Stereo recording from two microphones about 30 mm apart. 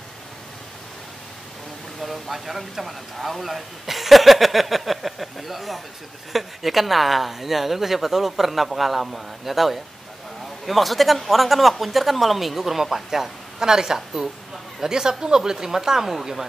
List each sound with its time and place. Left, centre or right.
2.0 s speech: centre